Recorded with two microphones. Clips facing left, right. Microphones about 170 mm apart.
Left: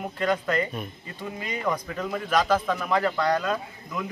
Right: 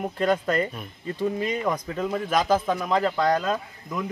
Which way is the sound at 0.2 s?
30° right (ahead or behind).